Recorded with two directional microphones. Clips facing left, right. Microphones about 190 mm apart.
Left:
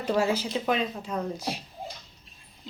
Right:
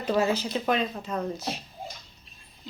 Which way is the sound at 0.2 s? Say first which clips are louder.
Right 1 dB; 10° left (ahead or behind).